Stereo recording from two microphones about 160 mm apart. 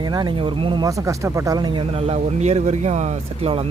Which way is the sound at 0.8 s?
20° right (ahead or behind).